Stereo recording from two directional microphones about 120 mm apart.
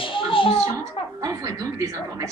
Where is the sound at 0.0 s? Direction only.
45° left (ahead or behind).